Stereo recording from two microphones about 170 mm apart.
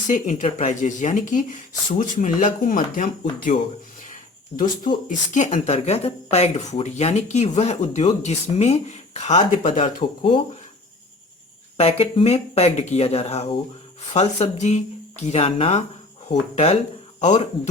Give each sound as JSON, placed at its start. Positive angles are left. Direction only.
{"t": 0.1, "sound": "speech", "side_deg": 45}
{"t": 4.1, "sound": "a sound", "side_deg": 50}
{"t": 5.0, "sound": "speech", "side_deg": 45}
{"t": 11.8, "sound": "speech", "side_deg": 35}